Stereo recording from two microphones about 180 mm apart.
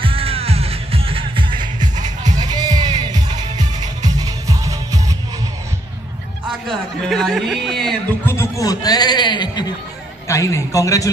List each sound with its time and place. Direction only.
0.0 s music: 30° right (ahead or behind)
7.1 s speech: centre (ahead or behind)
8.3 s a man's voice: 15° left (ahead or behind)